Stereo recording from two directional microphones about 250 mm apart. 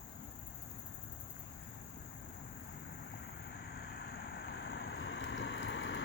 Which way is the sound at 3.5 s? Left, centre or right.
Left.